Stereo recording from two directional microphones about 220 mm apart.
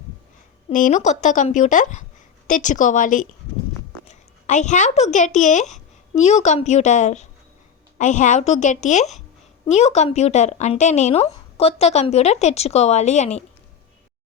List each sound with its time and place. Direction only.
0.7 s speech: 35° left (ahead or behind)